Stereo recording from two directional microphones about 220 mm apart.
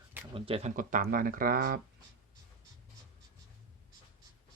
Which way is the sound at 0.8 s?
40° right (ahead or behind).